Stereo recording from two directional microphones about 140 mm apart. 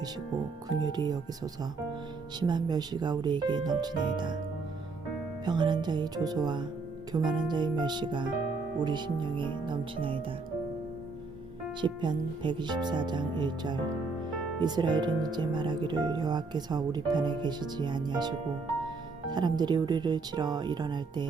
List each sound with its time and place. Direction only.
0.9 s speech: 30° right (ahead or behind)
2.4 s speech: 30° right (ahead or behind)
5.5 s speech: 30° right (ahead or behind)
11.8 s speech: 35° right (ahead or behind)